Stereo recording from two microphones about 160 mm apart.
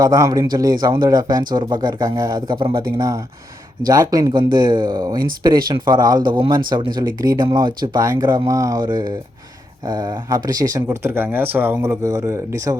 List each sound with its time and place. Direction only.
0.0 s speech: 20° right (ahead or behind)